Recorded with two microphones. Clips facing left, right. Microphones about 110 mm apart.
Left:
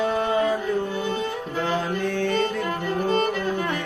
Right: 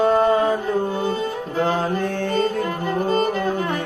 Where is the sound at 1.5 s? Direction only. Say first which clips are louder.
Right 5 dB; 45° right (ahead or behind).